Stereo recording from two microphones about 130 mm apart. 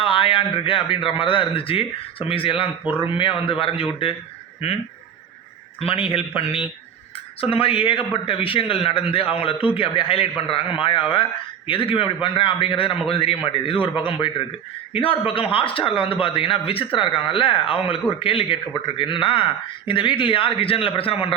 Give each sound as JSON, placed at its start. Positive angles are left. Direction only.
{"t": 0.0, "sound": "a sound", "side_deg": 40}
{"t": 1.1, "sound": "a man's voice", "side_deg": 45}
{"t": 5.8, "sound": "a man's voice", "side_deg": 45}